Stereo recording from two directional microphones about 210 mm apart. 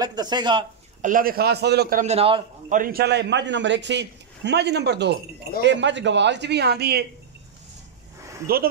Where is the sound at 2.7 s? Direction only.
45° right (ahead or behind).